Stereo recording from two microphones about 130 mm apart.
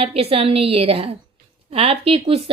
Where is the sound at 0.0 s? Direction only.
50° right (ahead or behind).